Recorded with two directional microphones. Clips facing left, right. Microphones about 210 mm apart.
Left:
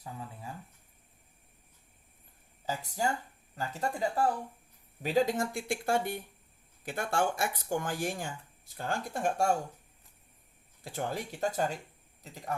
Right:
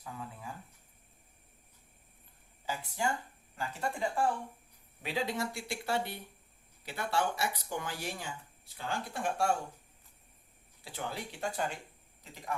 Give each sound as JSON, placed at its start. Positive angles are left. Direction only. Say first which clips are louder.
{"t": 2.6, "sound": "speech", "louder": "left 2 dB", "side_deg": 40}
{"t": 10.8, "sound": "speech", "louder": "left 5 dB", "side_deg": 45}